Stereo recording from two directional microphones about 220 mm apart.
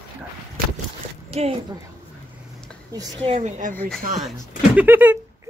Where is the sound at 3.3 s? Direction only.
30° right (ahead or behind).